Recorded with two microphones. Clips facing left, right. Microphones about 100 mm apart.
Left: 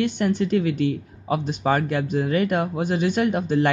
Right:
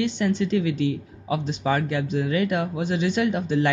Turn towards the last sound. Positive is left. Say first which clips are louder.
# left 2 dB
turn(degrees=50)  # may be behind; listen again after turning